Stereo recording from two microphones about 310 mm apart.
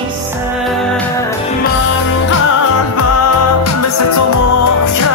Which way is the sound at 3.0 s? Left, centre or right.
Left.